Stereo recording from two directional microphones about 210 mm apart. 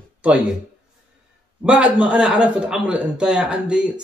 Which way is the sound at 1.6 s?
5° right (ahead or behind).